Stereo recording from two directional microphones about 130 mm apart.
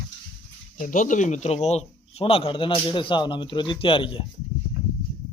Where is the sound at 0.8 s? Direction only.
85° left; by 4.2 s 40° left (ahead or behind).